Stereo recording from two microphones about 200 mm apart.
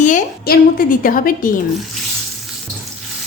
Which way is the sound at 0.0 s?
45° left (ahead or behind).